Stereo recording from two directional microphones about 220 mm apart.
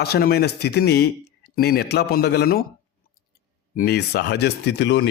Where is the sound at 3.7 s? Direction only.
45° left (ahead or behind).